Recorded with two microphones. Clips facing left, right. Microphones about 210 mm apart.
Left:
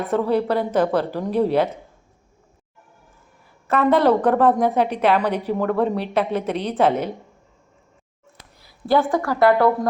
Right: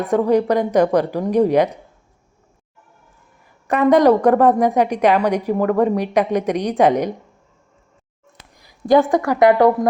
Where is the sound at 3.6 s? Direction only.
15° right (ahead or behind).